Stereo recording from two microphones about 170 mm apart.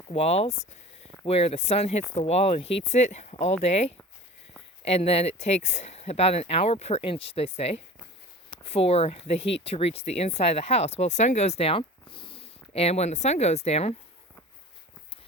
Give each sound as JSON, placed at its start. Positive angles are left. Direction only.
{"t": 0.1, "sound": "speech", "side_deg": 40}